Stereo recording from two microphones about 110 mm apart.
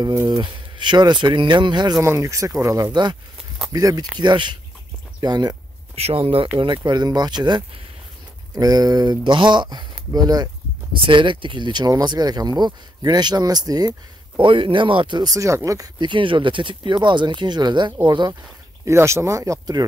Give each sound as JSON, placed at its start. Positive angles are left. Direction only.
{"t": 0.3, "sound": "speech", "side_deg": -45}
{"t": 2.0, "sound": "speech", "side_deg": -30}
{"t": 4.2, "sound": "speech", "side_deg": -45}
{"t": 5.9, "sound": "speech", "side_deg": -65}
{"t": 6.6, "sound": "speech", "side_deg": -40}
{"t": 11.0, "sound": "speech", "side_deg": -50}
{"t": 14.4, "sound": "speech", "side_deg": -50}
{"t": 16.0, "sound": "speech", "side_deg": -50}
{"t": 18.9, "sound": "speech", "side_deg": -25}